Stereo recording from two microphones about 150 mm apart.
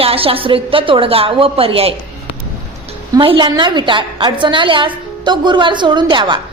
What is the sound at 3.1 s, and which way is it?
A woman's voice, 35° right (ahead or behind).